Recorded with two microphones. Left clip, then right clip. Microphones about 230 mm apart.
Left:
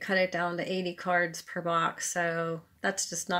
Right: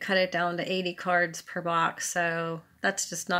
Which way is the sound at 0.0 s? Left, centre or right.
Centre.